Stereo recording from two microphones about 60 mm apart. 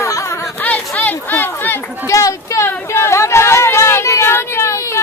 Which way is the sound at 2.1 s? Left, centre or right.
Left.